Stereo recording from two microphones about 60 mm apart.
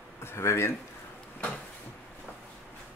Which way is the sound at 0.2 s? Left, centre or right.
Left.